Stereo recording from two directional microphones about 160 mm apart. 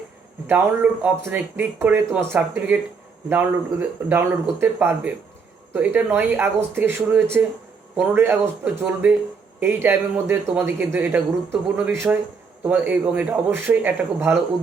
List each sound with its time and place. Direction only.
0.4 s speech: 10° right (ahead or behind)